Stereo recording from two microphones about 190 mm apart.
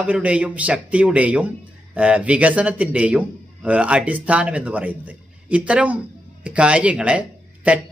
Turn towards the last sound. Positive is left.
turn(degrees=-5)  # may be behind; listen again after turning